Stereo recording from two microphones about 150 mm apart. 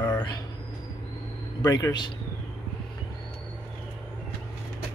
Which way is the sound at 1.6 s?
25° left (ahead or behind).